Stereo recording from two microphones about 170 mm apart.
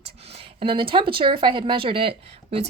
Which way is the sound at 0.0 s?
35° right (ahead or behind).